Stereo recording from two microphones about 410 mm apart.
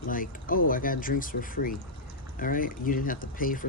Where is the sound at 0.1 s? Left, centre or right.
Centre.